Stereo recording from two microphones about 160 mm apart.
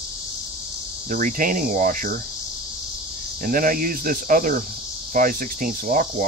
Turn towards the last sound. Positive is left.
turn(degrees=-60)  # may be behind; listen again after turning